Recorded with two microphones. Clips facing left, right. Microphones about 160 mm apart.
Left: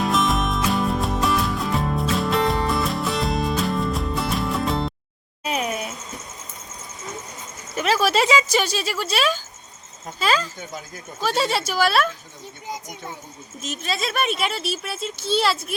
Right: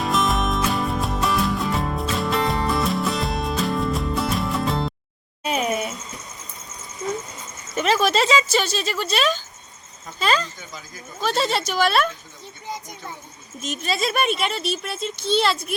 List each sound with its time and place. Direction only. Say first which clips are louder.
0.0 s music: even; centre (ahead or behind)
5.4 s a sound: right 2 dB; centre (ahead or behind)
7.8 s speech: even; 5° left (ahead or behind)
12.6 s a child's voice: even; 15° left (ahead or behind)
13.6 s speech: right 2 dB; centre (ahead or behind)